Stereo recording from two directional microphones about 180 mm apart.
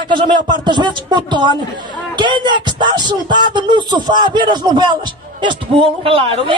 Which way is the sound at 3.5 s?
25° right (ahead or behind).